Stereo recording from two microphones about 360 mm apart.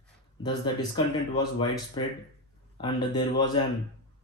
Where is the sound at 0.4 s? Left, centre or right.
Centre.